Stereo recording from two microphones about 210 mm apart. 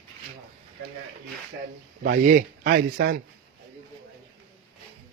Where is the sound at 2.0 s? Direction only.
45° right (ahead or behind).